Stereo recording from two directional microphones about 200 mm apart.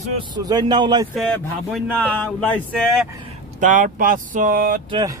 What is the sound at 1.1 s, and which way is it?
Speech, centre (ahead or behind).